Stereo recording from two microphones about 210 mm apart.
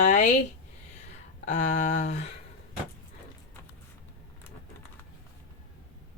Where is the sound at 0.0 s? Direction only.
35° left (ahead or behind).